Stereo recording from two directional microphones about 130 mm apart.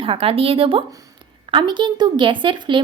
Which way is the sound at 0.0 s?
45° right (ahead or behind).